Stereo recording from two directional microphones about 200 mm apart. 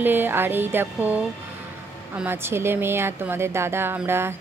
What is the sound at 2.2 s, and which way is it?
Speech, 10° right (ahead or behind).